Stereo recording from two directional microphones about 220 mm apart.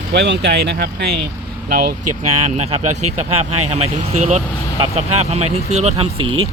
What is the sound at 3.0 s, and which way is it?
Speech, 90° right.